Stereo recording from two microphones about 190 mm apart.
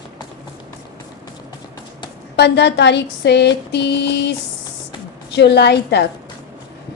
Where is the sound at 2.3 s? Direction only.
65° left (ahead or behind).